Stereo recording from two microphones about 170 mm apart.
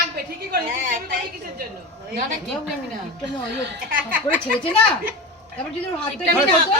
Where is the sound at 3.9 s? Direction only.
55° right (ahead or behind).